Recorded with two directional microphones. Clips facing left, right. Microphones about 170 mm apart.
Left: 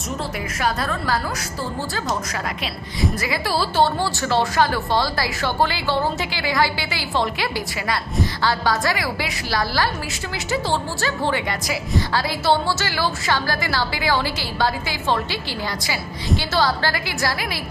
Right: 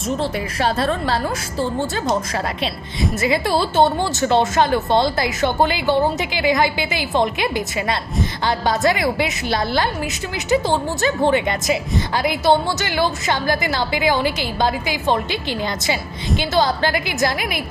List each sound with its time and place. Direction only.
0.2 s speech: 30° right (ahead or behind)